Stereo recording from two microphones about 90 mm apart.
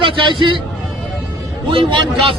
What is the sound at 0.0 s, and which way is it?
Speech, 65° right (ahead or behind).